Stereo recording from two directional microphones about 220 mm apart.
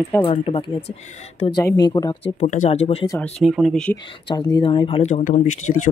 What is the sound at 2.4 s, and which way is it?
Speech, 35° left (ahead or behind).